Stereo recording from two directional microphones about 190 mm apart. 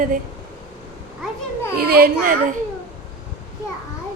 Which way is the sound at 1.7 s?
50° right (ahead or behind).